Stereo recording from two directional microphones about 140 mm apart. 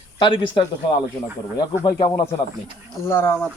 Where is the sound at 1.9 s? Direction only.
40° left (ahead or behind).